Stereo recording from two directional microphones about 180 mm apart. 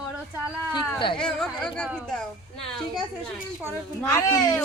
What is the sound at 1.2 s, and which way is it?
Speech, 5° left (ahead or behind).